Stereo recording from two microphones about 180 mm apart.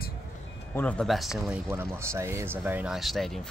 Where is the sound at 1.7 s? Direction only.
15° right (ahead or behind).